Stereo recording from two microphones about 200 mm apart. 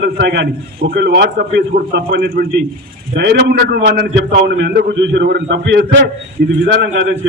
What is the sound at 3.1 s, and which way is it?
A man's voice, 60° right (ahead or behind).